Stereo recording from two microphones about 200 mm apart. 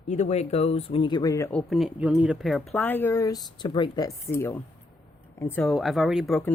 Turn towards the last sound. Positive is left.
turn(degrees=0)  # may be behind; listen again after turning